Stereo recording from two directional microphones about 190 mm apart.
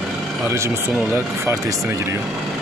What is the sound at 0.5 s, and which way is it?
Speech, 15° right (ahead or behind).